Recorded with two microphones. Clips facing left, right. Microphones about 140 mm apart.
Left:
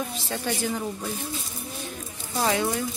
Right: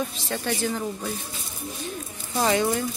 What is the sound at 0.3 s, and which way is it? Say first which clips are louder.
Speech: right 1 dB; 10° left (ahead or behind).